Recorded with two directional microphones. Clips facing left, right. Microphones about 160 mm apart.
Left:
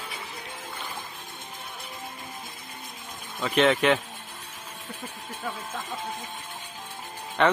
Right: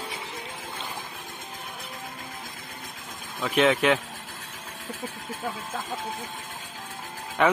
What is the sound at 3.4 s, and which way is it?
Speech, centre (ahead or behind).